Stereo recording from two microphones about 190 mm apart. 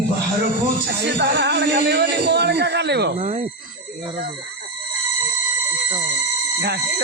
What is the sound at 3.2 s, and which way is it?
Speech, 35° right (ahead or behind).